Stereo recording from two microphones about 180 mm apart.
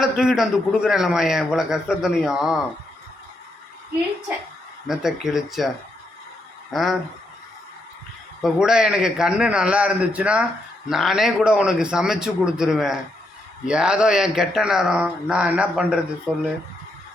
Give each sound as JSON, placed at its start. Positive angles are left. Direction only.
{"t": 0.0, "sound": "a man's voice", "side_deg": -5}
{"t": 4.9, "sound": "speech", "side_deg": -5}
{"t": 8.4, "sound": "speech", "side_deg": 0}